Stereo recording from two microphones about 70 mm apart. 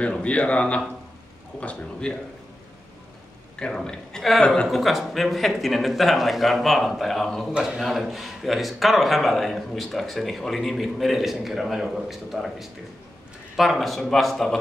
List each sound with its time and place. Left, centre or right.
0.0 s a man's voice: centre
3.5 s a man's voice: centre
7.5 s a man's voice: centre